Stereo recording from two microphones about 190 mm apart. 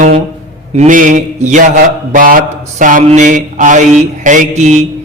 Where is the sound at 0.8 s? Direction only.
45° right (ahead or behind).